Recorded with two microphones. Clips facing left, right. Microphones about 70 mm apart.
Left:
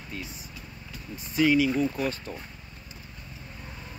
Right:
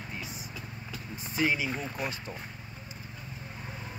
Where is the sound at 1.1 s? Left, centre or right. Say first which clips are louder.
Left 7 dB; right.